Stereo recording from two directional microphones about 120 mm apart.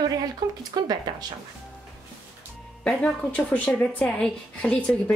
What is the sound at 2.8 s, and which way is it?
A woman's voice, 10° left (ahead or behind).